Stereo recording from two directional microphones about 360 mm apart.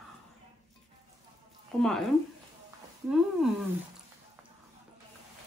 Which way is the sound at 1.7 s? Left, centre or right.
Centre.